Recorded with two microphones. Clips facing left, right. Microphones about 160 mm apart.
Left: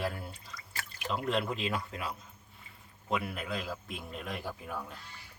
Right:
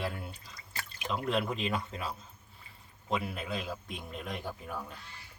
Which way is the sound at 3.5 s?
20° right (ahead or behind).